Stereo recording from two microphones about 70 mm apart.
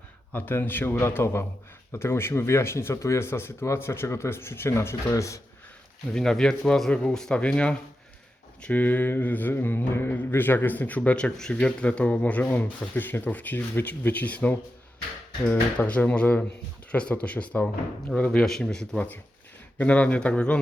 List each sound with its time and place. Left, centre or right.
0.3 s speech: left
6.1 s speech: centre
18.9 s speech: left